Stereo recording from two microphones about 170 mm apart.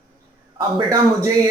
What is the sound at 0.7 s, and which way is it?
Speech, 20° right (ahead or behind).